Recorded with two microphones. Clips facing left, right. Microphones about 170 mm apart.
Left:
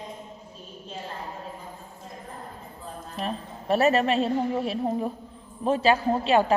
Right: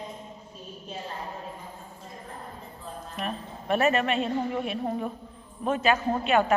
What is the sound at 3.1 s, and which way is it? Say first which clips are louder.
A woman's voice: left 2 dB; 35° left (ahead or behind).